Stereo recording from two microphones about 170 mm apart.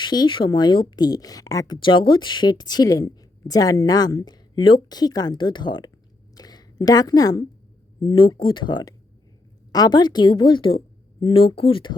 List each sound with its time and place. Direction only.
0.0 s speech: 25° left (ahead or behind)
6.3 s a sound: 25° left (ahead or behind)
8.0 s speech: 25° left (ahead or behind)